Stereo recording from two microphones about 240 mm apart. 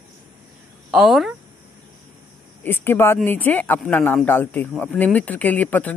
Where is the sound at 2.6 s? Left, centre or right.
Centre.